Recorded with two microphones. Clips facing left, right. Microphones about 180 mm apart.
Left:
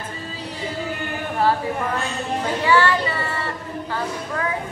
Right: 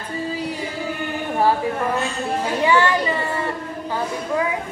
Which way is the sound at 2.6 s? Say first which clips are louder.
Right 1 dB; 15° right (ahead or behind).